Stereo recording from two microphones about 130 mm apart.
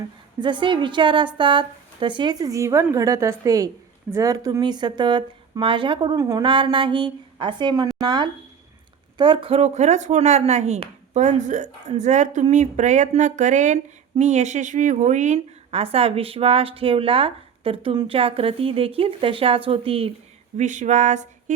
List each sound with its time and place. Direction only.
0.3 s a woman's voice: 35° right (ahead or behind); by 13.7 s 75° right (ahead or behind)
14.2 s a woman's voice: 60° right (ahead or behind); by 20.1 s 45° right (ahead or behind)
20.6 s a sound: 70° right (ahead or behind)